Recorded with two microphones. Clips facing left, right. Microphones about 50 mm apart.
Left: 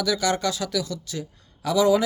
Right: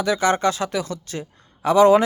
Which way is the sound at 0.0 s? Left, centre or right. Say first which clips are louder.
Right 5 dB; right.